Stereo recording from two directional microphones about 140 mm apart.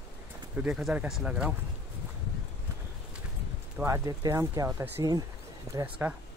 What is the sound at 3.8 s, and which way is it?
Speech, 20° right (ahead or behind).